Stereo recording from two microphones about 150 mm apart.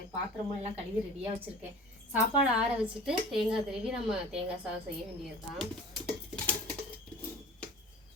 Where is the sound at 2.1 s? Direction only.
5° right (ahead or behind).